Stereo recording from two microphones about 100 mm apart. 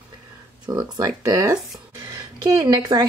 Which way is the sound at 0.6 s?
45° right (ahead or behind).